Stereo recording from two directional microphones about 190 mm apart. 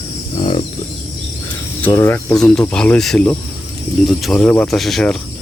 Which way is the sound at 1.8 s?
10° left (ahead or behind).